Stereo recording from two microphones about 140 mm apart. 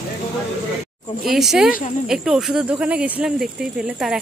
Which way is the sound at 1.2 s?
Centre (ahead or behind).